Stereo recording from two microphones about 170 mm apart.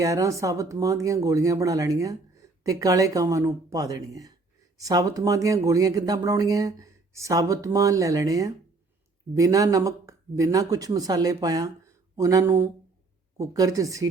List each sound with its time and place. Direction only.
0.0 s speech: 20° right (ahead or behind)